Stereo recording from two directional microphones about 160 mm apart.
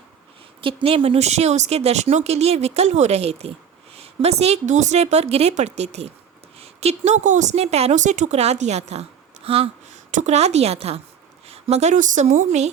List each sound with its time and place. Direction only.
0.6 s a woman's voice: 35° right (ahead or behind)
10.1 s speech: 50° right (ahead or behind)